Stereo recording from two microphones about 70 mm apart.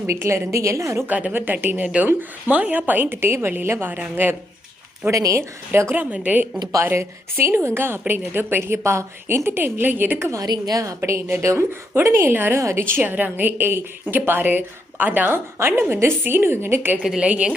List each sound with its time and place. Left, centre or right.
0.1 s a woman's voice: right
1.0 s a woman's voice: right
5.1 s a woman's voice: right
5.9 s a woman's voice: right
6.8 s a woman's voice: right
10.4 s a woman's voice: right
12.5 s a woman's voice: right
13.0 s a woman's voice: right
17.2 s a woman's voice: centre